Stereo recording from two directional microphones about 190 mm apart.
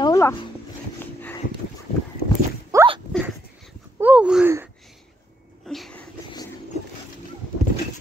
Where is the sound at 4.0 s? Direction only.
5° right (ahead or behind).